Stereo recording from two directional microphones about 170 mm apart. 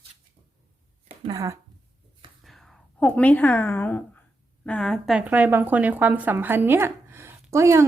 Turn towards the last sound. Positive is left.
turn(degrees=-15)  # may be behind; listen again after turning